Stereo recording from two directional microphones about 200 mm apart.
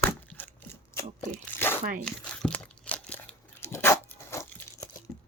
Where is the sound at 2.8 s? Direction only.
5° left (ahead or behind).